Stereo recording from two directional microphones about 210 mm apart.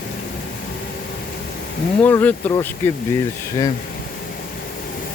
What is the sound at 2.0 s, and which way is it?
Speech, 10° left (ahead or behind).